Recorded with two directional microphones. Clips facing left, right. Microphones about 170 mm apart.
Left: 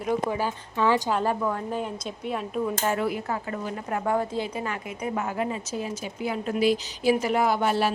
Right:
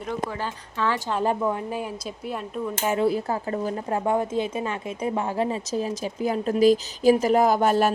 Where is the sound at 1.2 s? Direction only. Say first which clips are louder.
Right 2 dB; 15° right (ahead or behind).